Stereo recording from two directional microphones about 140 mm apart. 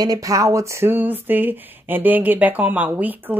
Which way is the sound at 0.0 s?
25° right (ahead or behind).